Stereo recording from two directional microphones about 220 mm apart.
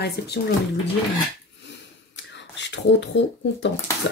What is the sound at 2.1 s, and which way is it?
Speech, 55° left (ahead or behind).